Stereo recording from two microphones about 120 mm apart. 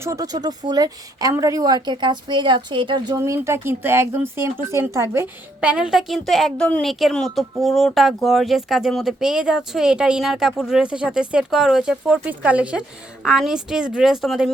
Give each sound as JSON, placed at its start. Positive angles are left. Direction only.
{"t": 0.0, "sound": "speech", "side_deg": -25}
{"t": 3.2, "sound": "speech", "side_deg": -25}
{"t": 5.5, "sound": "speech", "side_deg": -10}